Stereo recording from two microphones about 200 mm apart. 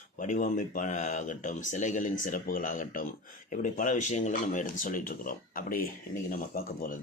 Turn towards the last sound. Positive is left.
turn(degrees=45)  # may be behind; listen again after turning